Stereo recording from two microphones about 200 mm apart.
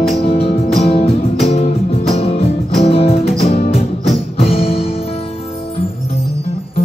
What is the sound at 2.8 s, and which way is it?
Music, 30° left (ahead or behind).